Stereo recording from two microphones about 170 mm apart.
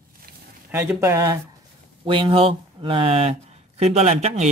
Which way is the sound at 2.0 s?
30° right (ahead or behind).